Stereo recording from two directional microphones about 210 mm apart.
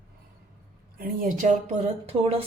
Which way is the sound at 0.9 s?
45° right (ahead or behind).